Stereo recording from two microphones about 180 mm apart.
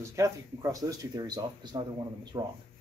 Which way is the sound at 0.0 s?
15° right (ahead or behind).